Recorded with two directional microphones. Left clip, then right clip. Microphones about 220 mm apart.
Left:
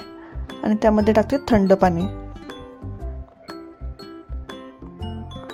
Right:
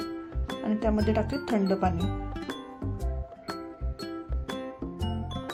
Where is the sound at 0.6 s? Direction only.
35° left (ahead or behind).